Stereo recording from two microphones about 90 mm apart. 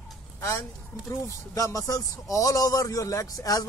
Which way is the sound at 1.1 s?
35° left (ahead or behind).